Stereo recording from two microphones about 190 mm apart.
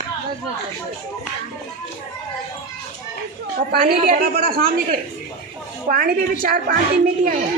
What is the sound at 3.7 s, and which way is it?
Speech, 50° right (ahead or behind).